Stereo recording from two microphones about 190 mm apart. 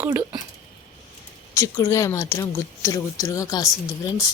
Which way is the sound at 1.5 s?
15° left (ahead or behind).